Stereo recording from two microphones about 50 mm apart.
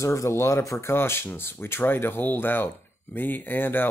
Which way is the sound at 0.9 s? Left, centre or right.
Left.